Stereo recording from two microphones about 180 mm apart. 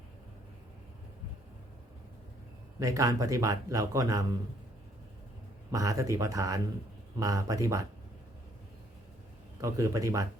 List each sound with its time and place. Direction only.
2.7 s speech: 20° right (ahead or behind)
5.7 s speech: 20° right (ahead or behind)
9.6 s speech: 20° right (ahead or behind)